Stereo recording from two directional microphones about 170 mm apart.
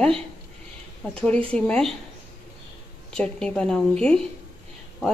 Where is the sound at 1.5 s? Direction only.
5° left (ahead or behind).